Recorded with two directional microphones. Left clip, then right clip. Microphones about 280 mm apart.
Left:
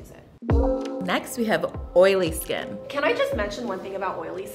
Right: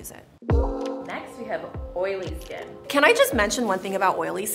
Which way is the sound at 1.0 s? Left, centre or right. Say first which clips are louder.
Left 8 dB; left.